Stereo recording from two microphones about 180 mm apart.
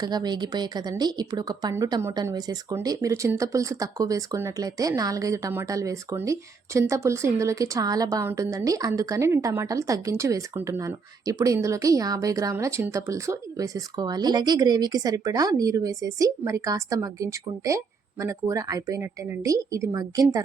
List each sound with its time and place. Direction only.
0.0 s a woman's voice: 20° right (ahead or behind)